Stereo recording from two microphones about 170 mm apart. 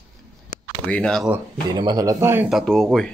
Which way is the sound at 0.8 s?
5° left (ahead or behind).